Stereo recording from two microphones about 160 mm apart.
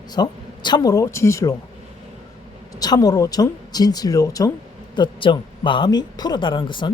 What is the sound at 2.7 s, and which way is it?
Speech, 25° left (ahead or behind).